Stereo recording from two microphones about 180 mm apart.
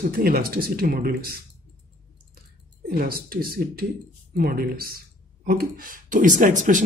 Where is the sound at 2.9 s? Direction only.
55° right (ahead or behind).